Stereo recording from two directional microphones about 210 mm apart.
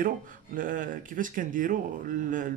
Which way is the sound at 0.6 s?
40° right (ahead or behind).